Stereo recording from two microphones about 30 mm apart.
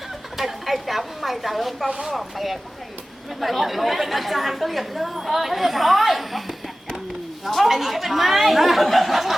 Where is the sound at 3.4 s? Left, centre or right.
Centre.